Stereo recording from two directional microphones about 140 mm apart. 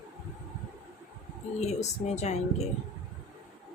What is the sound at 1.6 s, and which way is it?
Speech, 55° left (ahead or behind).